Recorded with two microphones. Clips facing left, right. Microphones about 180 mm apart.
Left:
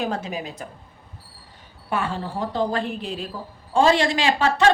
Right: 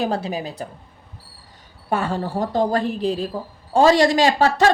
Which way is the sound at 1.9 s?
40° right (ahead or behind).